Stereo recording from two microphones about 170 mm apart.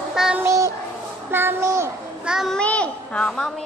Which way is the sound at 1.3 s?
15° right (ahead or behind).